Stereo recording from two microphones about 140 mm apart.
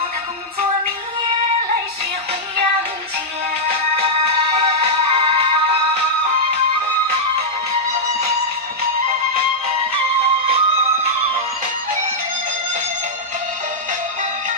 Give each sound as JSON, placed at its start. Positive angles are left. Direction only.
{"t": 3.7, "sound": "music", "side_deg": -45}
{"t": 9.7, "sound": "music", "side_deg": -45}